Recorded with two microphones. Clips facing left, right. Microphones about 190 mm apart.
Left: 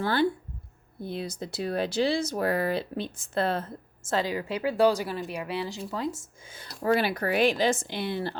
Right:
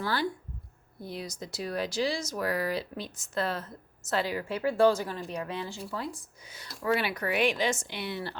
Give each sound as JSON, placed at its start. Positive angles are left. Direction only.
{"t": 0.0, "sound": "speech", "side_deg": 25}
{"t": 2.0, "sound": "speech", "side_deg": 60}
{"t": 2.3, "sound": "speech", "side_deg": 30}
{"t": 4.1, "sound": "speech", "side_deg": 20}